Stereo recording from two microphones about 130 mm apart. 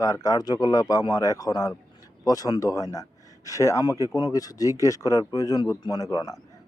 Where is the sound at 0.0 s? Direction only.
25° left (ahead or behind).